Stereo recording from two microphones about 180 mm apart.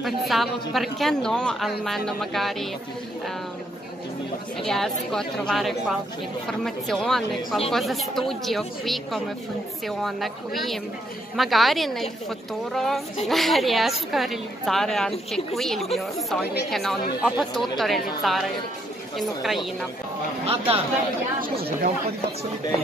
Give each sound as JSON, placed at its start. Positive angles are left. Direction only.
{"t": 0.0, "sound": "a woman's voice", "side_deg": 0}
{"t": 4.6, "sound": "a woman's voice", "side_deg": 0}
{"t": 20.4, "sound": "speech", "side_deg": -35}